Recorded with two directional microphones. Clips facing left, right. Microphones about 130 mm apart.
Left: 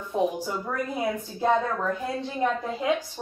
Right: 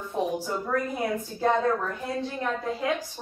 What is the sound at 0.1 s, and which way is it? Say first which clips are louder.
Speech: left 4 dB; 20° left (ahead or behind).